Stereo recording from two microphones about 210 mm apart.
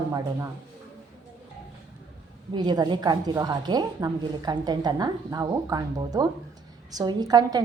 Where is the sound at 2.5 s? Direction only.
20° right (ahead or behind).